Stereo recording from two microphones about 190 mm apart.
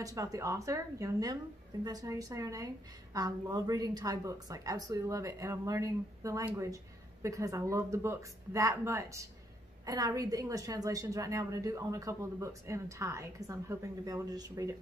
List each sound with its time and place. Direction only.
0.0 s a woman's voice: 20° right (ahead or behind)